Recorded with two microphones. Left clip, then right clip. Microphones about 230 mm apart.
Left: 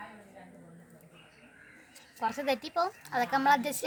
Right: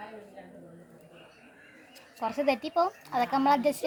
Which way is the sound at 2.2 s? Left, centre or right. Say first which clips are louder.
Right 3 dB; left.